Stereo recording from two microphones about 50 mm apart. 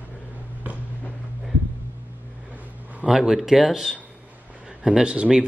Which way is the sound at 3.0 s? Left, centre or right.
Centre.